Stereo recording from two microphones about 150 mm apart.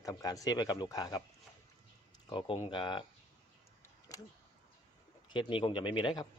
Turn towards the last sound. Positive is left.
turn(degrees=30)  # may be behind; listen again after turning